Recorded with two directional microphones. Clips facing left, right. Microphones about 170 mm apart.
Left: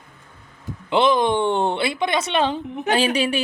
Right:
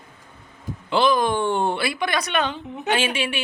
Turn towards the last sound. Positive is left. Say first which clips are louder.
# left 4 dB
turn(degrees=40)  # may be behind; listen again after turning